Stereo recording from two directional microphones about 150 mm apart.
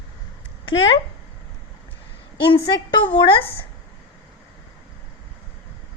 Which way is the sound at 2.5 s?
30° left (ahead or behind).